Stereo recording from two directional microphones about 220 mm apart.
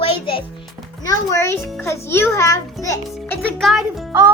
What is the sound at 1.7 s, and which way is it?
A child's voice, 10° left (ahead or behind).